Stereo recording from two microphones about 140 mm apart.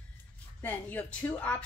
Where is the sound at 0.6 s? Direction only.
10° left (ahead or behind).